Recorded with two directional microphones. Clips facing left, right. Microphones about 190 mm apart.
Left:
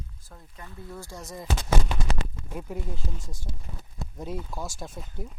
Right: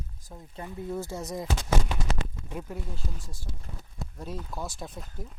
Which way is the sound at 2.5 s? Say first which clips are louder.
Left 1 dB; 5° left (ahead or behind).